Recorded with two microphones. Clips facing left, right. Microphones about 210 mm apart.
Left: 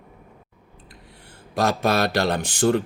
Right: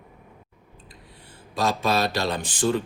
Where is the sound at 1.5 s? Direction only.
65° left (ahead or behind).